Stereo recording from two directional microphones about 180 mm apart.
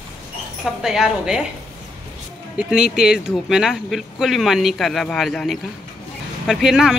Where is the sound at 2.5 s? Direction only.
5° right (ahead or behind).